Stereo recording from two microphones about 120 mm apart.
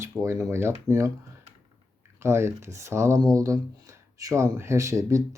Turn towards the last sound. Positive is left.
turn(degrees=-25)  # may be behind; listen again after turning